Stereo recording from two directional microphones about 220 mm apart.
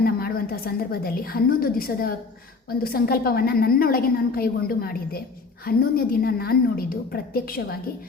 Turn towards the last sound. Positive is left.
turn(degrees=40)  # may be behind; listen again after turning